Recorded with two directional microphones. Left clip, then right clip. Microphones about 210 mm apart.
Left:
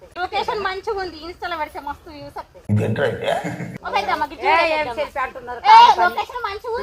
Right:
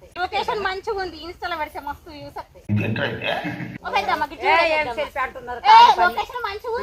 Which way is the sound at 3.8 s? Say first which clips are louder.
Left 1 dB; centre (ahead or behind).